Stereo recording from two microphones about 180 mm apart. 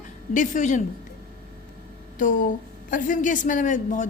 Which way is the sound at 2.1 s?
45° left (ahead or behind).